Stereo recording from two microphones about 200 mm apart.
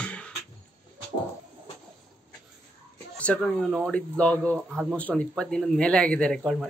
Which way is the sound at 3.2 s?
5° left (ahead or behind).